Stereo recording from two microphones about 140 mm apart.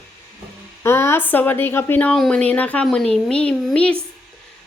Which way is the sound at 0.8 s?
20° left (ahead or behind).